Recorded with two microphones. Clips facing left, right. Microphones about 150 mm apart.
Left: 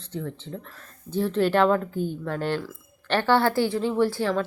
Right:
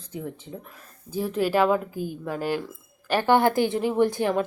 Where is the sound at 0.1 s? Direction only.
10° right (ahead or behind).